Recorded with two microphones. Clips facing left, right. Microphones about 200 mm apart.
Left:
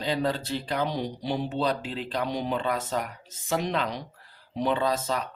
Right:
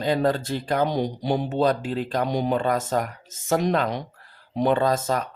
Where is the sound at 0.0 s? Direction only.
50° right (ahead or behind).